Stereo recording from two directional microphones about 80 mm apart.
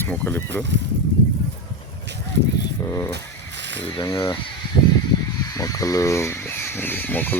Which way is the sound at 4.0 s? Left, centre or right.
Left.